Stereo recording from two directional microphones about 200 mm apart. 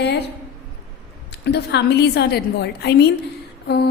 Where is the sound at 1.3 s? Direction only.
55° left (ahead or behind).